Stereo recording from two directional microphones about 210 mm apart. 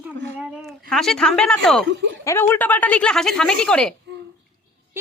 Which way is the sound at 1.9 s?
60° right (ahead or behind).